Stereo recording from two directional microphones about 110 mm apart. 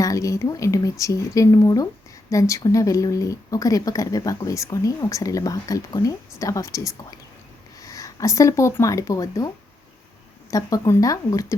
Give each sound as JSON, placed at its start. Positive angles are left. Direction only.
{"t": 0.0, "sound": "speech", "side_deg": 30}
{"t": 10.5, "sound": "speech", "side_deg": 25}